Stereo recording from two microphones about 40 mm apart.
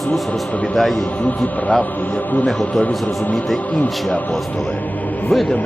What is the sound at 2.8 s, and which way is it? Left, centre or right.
Speech, left.